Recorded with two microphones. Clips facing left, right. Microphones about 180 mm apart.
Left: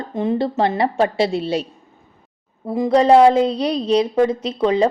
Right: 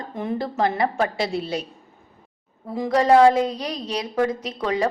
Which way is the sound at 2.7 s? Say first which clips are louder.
Left 4 dB; 20° left (ahead or behind).